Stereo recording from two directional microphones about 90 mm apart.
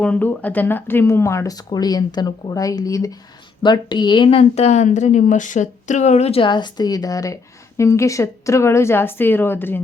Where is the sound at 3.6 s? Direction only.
55° left (ahead or behind); by 4.4 s 75° left (ahead or behind).